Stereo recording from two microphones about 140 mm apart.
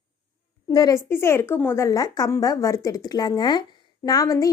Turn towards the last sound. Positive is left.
turn(degrees=25)  # may be behind; listen again after turning